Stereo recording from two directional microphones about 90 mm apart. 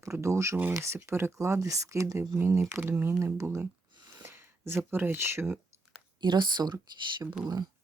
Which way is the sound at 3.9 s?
55° right (ahead or behind).